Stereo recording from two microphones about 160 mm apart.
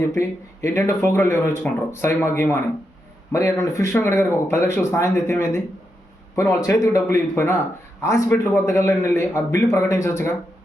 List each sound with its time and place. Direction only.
0.1 s speech: 15° left (ahead or behind)